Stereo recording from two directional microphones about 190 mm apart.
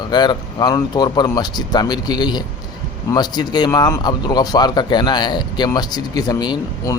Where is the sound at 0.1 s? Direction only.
20° left (ahead or behind).